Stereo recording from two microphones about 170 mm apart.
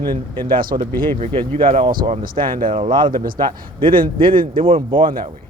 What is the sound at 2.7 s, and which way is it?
Speech, 30° right (ahead or behind).